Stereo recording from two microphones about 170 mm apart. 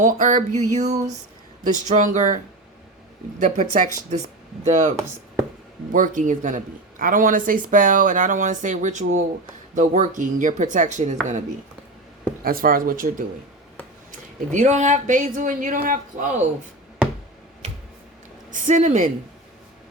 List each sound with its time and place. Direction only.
0.0 s speech: 50° right (ahead or behind)
3.4 s speech: 50° right (ahead or behind)
12.4 s speech: 60° right (ahead or behind)
18.5 s speech: 50° right (ahead or behind)